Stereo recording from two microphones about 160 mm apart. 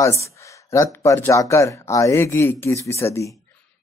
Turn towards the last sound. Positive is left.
turn(degrees=15)  # may be behind; listen again after turning